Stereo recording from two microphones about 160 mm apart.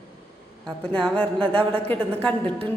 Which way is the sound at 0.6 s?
5° left (ahead or behind).